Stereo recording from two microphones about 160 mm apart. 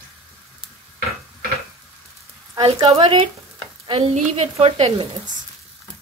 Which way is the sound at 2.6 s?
40° right (ahead or behind).